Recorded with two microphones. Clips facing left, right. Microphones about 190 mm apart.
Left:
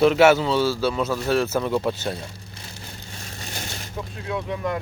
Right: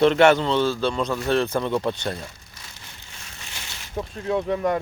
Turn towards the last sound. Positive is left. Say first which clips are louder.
# right 4 dB
turn(degrees=-35)  # may be behind; listen again after turning